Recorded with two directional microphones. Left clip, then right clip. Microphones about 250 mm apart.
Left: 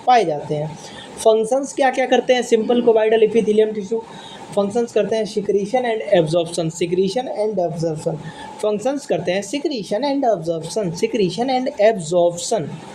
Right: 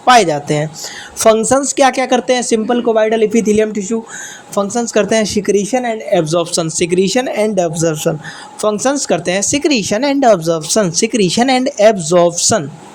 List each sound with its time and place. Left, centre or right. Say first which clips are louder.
0.0 s speech: right 6 dB; right
8.6 s speech: right 6 dB; right